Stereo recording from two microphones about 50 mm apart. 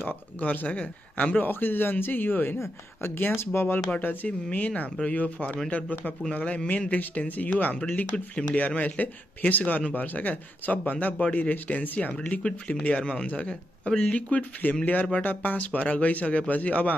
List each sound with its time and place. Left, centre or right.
0.0 s speech: left
1.4 s speech: left
4.0 s speech: left